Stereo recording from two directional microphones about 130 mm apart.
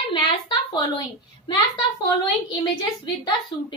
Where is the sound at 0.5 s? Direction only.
30° left (ahead or behind).